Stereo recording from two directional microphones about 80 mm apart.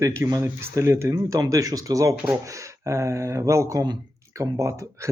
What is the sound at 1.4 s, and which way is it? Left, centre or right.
Speech, right.